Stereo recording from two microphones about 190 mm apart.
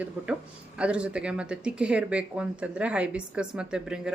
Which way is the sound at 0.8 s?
5° right (ahead or behind).